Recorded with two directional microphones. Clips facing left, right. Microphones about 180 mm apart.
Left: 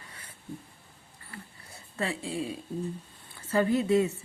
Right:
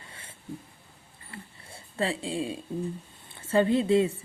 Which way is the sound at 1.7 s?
30° right (ahead or behind).